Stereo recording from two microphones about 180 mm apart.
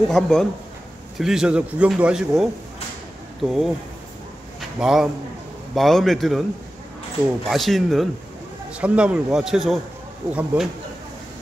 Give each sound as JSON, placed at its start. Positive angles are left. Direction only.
{"t": 0.1, "sound": "a man's voice", "side_deg": 0}
{"t": 7.4, "sound": "a man's voice", "side_deg": 0}